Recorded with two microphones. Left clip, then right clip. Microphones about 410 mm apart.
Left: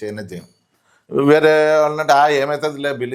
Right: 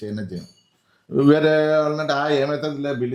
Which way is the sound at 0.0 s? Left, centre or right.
Left.